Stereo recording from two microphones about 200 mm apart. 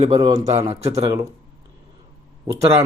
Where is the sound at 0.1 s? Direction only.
20° right (ahead or behind).